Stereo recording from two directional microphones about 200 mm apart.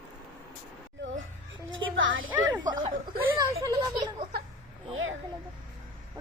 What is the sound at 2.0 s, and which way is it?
Music, 75° right (ahead or behind).